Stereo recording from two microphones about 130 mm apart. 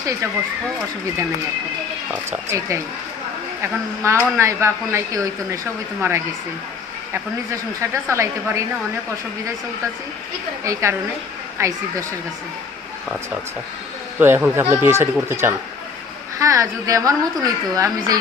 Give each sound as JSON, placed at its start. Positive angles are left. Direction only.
{"t": 0.0, "sound": "speech", "side_deg": -25}
{"t": 2.5, "sound": "a woman's voice", "side_deg": -20}
{"t": 10.7, "sound": "a woman's voice", "side_deg": -20}
{"t": 14.2, "sound": "a woman's voice", "side_deg": -15}